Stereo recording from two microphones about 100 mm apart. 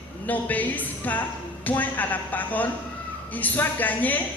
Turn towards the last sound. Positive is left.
turn(degrees=15)  # may be behind; listen again after turning